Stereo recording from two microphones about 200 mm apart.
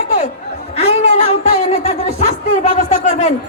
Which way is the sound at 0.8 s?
30° left (ahead or behind).